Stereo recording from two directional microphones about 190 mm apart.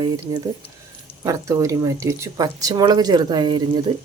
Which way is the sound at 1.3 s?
15° right (ahead or behind).